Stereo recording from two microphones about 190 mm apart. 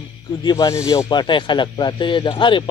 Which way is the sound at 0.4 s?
20° left (ahead or behind).